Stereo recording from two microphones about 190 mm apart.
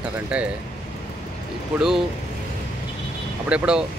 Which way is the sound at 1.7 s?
5° right (ahead or behind).